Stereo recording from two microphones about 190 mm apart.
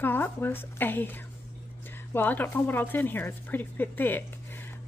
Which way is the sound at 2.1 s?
10° left (ahead or behind).